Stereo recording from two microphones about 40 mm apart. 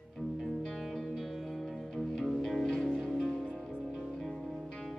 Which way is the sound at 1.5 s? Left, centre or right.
Centre.